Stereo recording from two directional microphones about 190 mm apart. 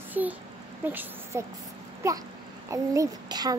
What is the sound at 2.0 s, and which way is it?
Babbling, 15° right (ahead or behind).